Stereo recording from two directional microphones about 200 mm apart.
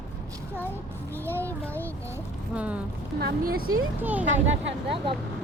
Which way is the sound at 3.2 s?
50° right (ahead or behind).